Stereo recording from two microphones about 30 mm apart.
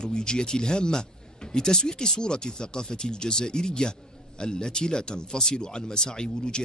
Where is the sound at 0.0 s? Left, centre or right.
Left.